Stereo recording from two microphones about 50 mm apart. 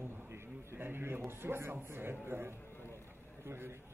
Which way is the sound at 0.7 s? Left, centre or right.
Right.